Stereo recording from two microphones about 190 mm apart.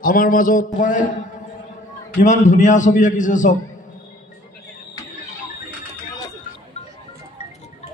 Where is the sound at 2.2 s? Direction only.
40° left (ahead or behind).